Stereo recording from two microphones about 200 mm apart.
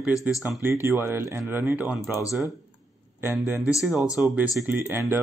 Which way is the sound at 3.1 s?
10° right (ahead or behind).